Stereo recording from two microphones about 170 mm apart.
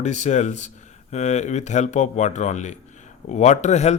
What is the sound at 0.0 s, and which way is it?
Speech, 45° left (ahead or behind).